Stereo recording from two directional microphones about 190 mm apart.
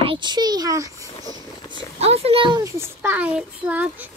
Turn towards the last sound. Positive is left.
turn(degrees=-10)  # may be behind; listen again after turning